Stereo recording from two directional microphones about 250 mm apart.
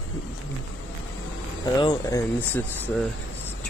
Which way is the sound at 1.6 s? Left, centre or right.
Centre.